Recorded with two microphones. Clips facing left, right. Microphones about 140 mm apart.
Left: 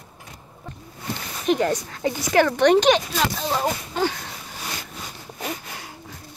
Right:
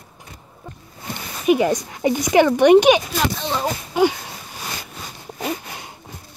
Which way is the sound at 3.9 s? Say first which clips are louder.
Right 6 dB; 15° right (ahead or behind).